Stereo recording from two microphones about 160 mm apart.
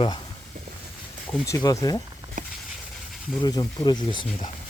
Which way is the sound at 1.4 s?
20° left (ahead or behind).